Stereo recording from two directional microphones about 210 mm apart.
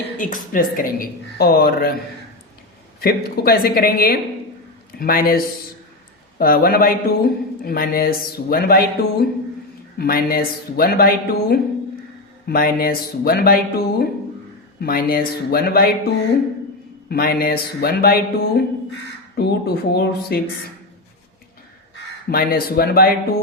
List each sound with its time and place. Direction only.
0.2 s speech: 40° left (ahead or behind)
3.0 s speech: 45° left (ahead or behind)
6.4 s speech: 45° left (ahead or behind)
17.1 s speech: 45° left (ahead or behind)
22.3 s speech: 45° left (ahead or behind)